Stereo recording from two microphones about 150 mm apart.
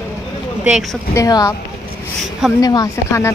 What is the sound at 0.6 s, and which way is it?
Speech, centre (ahead or behind).